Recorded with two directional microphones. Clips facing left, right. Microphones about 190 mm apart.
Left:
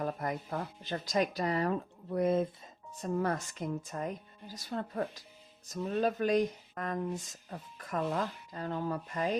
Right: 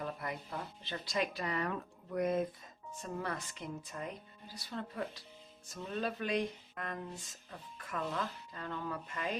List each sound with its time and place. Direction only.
0.0 s speech: 45° left (ahead or behind); by 2.5 s 30° left (ahead or behind)
2.9 s speech: 40° left (ahead or behind)